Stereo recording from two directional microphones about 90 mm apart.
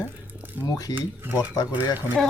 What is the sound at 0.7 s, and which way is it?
Speech, 45° left (ahead or behind).